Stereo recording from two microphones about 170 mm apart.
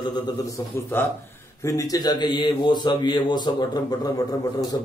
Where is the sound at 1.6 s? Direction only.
20° left (ahead or behind).